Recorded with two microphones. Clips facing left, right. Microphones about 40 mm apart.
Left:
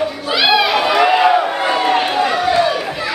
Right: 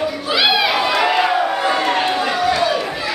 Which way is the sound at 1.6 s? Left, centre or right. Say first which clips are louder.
Left 2 dB; left.